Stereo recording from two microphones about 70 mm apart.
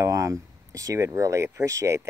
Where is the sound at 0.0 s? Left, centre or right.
Right.